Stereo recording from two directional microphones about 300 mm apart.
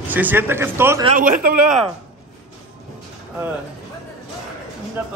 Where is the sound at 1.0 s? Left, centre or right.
Right.